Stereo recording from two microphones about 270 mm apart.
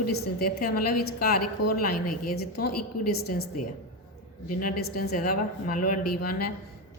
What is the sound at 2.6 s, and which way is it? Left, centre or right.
Speech, left.